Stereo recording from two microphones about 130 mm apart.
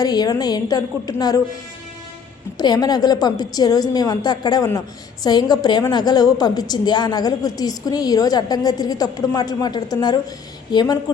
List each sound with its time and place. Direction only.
0.0 s a woman's voice: 30° left (ahead or behind)
2.6 s a woman's voice: 30° left (ahead or behind)